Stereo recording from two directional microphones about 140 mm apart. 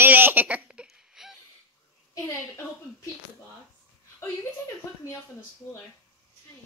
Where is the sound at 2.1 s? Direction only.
20° left (ahead or behind).